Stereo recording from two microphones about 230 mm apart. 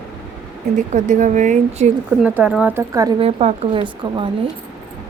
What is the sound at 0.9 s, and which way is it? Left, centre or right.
Speech, right.